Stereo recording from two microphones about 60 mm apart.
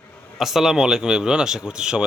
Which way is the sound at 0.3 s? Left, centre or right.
Centre.